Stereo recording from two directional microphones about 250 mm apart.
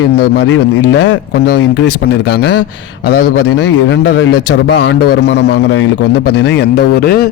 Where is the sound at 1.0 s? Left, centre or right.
Left.